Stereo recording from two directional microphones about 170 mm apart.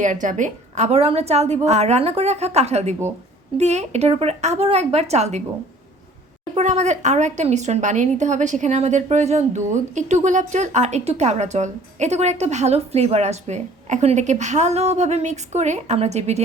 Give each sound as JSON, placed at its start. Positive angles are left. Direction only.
{"t": 0.0, "sound": "a woman's voice", "side_deg": -50}
{"t": 6.5, "sound": "speech", "side_deg": -40}